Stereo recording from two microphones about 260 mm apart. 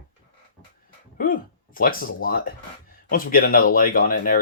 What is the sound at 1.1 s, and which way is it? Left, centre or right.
Speech, left.